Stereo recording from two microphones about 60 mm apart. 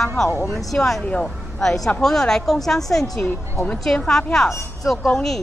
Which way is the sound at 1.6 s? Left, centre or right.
Centre.